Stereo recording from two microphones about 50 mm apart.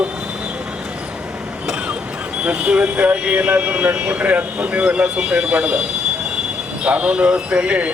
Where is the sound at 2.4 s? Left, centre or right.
Right.